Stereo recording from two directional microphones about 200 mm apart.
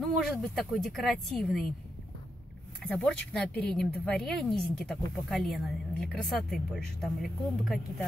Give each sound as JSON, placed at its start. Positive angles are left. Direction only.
{"t": 0.0, "sound": "speech", "side_deg": 0}
{"t": 2.8, "sound": "speech", "side_deg": 5}